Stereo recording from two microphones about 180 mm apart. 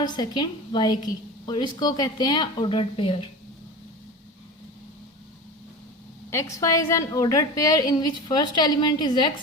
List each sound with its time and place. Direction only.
0.0 s a woman's voice: 20° left (ahead or behind)
6.3 s a woman's voice: 20° left (ahead or behind)